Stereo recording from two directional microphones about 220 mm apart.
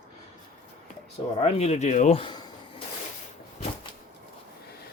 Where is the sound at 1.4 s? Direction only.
30° left (ahead or behind).